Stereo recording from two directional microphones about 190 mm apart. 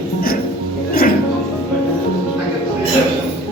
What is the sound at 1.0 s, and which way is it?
Music, 50° left (ahead or behind).